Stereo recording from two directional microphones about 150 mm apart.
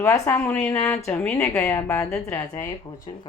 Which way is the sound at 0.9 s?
5° left (ahead or behind).